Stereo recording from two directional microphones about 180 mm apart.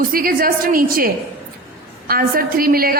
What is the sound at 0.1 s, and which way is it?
A woman's voice, 55° right (ahead or behind).